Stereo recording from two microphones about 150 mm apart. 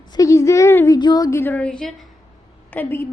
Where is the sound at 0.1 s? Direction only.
20° left (ahead or behind).